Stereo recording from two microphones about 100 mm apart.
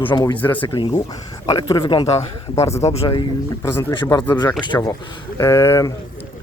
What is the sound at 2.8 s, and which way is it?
Speech, 90° left.